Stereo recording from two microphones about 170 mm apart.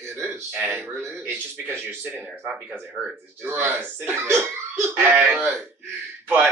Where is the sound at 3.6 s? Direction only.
15° right (ahead or behind).